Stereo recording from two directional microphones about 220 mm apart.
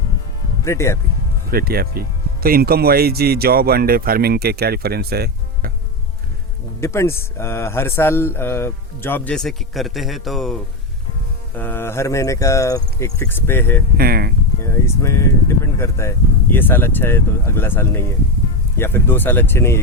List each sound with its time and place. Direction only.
0.6 s speech: 15° left (ahead or behind)
1.5 s speech: 45° right (ahead or behind)
6.8 s speech: 10° left (ahead or behind)
13.9 s speech: 45° right (ahead or behind)
14.6 s speech: 15° left (ahead or behind)